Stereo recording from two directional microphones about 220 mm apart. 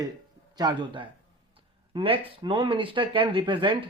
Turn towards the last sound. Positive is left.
turn(degrees=-20)  # may be behind; listen again after turning